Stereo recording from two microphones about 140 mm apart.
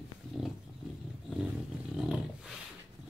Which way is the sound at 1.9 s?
5° right (ahead or behind).